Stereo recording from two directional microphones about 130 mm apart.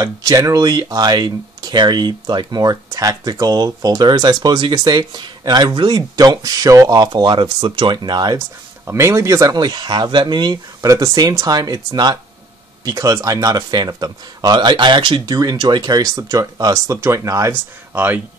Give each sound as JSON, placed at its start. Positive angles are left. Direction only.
{"t": 0.0, "sound": "speech", "side_deg": -25}
{"t": 8.8, "sound": "speech", "side_deg": -20}